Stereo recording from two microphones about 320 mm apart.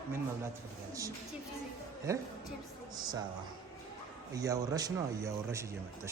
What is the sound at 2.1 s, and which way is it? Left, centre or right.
Speech, centre.